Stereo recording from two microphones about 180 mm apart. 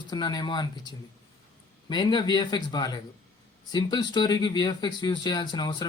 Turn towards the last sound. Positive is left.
turn(degrees=25)  # may be behind; listen again after turning